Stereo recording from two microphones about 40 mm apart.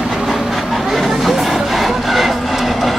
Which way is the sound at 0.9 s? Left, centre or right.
Centre.